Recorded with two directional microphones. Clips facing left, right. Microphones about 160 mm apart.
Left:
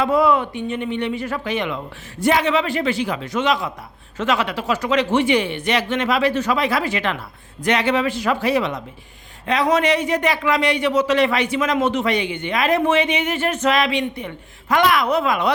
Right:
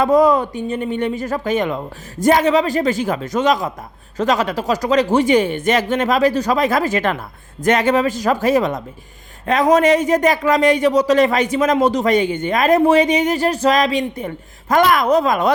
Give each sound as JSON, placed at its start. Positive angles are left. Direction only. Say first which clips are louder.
{"t": 0.0, "sound": "speech", "louder": "right 4 dB", "side_deg": -40}